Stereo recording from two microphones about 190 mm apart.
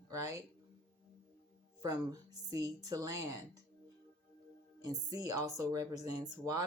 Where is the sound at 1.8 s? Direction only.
20° right (ahead or behind).